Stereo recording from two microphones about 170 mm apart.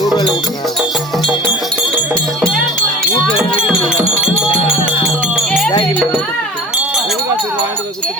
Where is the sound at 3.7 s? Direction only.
5° right (ahead or behind).